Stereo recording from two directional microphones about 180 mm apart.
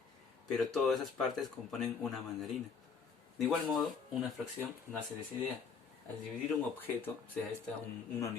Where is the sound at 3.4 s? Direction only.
Centre (ahead or behind).